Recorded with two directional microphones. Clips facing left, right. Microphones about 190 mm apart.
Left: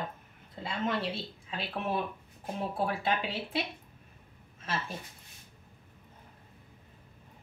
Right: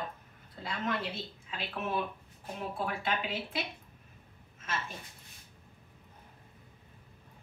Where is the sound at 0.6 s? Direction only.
30° left (ahead or behind).